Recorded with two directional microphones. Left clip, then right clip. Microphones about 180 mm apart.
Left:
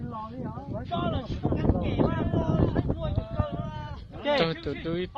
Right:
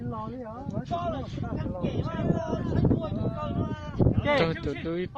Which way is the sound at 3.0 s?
20° right (ahead or behind).